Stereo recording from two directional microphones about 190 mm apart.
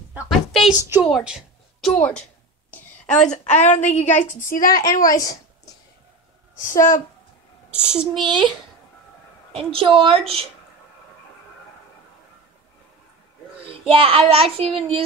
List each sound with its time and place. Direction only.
0.1 s a sound: 5° right (ahead or behind)
2.0 s a woman's voice: 10° left (ahead or behind)
3.1 s a woman's voice: 40° left (ahead or behind)
5.0 s speech: 20° left (ahead or behind)
7.7 s speech: 5° right (ahead or behind)
8.2 s child singing: 25° right (ahead or behind)
13.7 s child singing: 30° right (ahead or behind)